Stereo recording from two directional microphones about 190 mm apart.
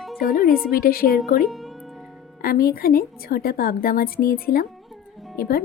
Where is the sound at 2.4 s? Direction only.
50° left (ahead or behind).